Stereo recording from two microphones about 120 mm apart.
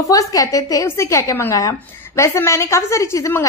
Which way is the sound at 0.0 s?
30° left (ahead or behind).